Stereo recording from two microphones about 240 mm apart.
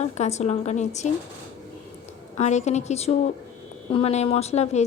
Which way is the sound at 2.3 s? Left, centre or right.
Left.